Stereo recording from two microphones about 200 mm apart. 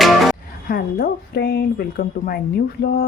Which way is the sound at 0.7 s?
50° left (ahead or behind).